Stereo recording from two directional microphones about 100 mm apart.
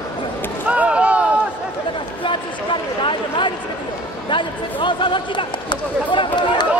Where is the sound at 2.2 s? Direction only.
55° left (ahead or behind).